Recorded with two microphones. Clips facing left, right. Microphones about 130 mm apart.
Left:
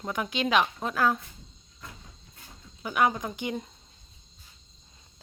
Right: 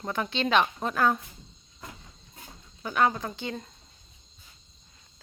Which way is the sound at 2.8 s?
10° left (ahead or behind).